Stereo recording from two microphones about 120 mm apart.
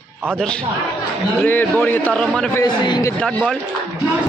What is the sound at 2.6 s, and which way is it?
Speech, 35° left (ahead or behind).